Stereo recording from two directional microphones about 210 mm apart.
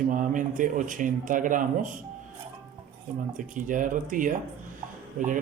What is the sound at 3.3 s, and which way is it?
Speech, 40° right (ahead or behind).